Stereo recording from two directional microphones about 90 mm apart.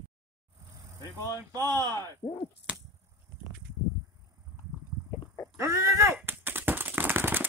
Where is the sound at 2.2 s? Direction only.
65° left (ahead or behind).